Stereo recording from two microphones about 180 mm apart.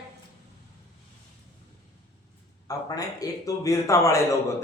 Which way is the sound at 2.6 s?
20° left (ahead or behind).